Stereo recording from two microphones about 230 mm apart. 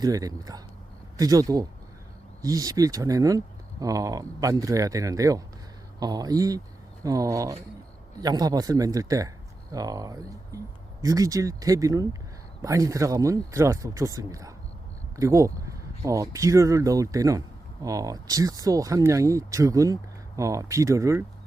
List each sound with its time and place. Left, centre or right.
0.0 s speech: centre